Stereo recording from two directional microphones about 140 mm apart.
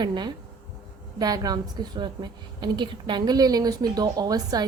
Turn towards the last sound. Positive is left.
turn(degrees=-25)  # may be behind; listen again after turning